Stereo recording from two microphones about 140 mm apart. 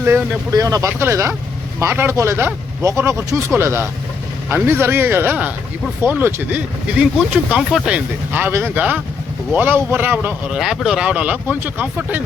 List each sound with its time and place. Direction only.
0.5 s speech: 25° right (ahead or behind)